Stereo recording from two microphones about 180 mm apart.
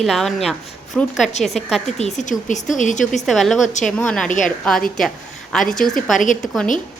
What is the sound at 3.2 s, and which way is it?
Speech, centre (ahead or behind).